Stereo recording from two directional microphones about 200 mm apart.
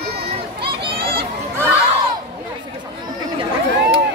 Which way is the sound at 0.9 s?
25° right (ahead or behind).